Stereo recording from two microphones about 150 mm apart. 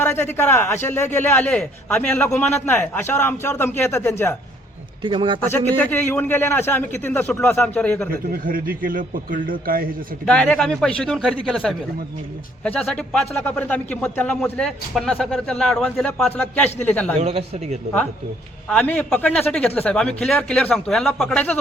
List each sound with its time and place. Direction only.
0.0 s a man's voice: 15° left (ahead or behind)
5.0 s a man's voice: 35° right (ahead or behind)
5.4 s a man's voice: 15° left (ahead or behind)
8.1 s a man's voice: 75° right (ahead or behind)
10.2 s a man's voice: 5° left (ahead or behind)
17.2 s a man's voice: 45° right (ahead or behind)
18.7 s a man's voice: 10° left (ahead or behind)